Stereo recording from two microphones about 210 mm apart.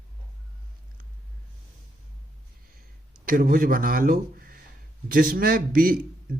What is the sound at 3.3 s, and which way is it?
A man's voice, 40° right (ahead or behind).